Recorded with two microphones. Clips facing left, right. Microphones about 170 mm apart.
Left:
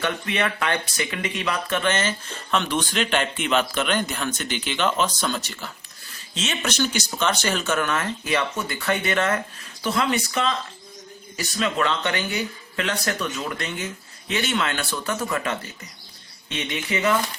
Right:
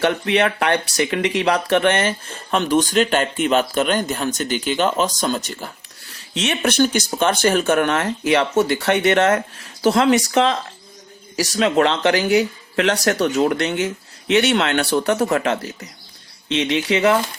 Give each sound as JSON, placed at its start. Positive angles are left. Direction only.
{"t": 0.0, "sound": "speech", "side_deg": -70}
{"t": 6.3, "sound": "speech", "side_deg": -65}
{"t": 6.7, "sound": "speech", "side_deg": -55}
{"t": 8.2, "sound": "speech", "side_deg": -75}
{"t": 11.3, "sound": "speech", "side_deg": -85}
{"t": 16.5, "sound": "speech", "side_deg": -85}